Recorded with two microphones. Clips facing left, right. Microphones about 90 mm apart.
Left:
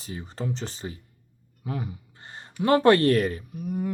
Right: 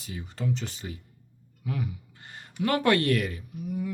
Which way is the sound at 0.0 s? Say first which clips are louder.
Even; 35° left (ahead or behind).